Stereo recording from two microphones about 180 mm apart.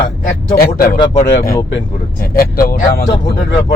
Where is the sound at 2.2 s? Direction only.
55° left (ahead or behind).